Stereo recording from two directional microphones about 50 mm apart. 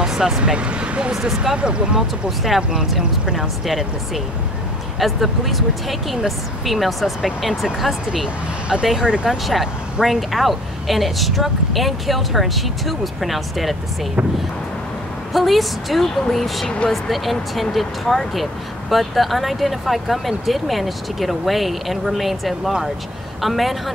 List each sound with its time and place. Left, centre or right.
0.0 s speech: centre
1.1 s speech: centre
2.0 s speech: centre
15.3 s speech: centre